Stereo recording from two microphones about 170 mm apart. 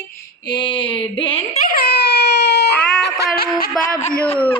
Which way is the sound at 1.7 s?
65° left (ahead or behind).